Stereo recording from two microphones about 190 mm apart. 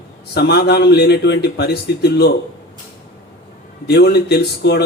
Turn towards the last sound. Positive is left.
turn(degrees=60)  # may be behind; listen again after turning